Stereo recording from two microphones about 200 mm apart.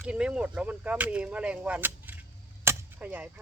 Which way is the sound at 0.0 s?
5° right (ahead or behind).